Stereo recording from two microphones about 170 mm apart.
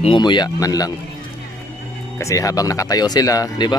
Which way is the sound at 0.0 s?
30° left (ahead or behind).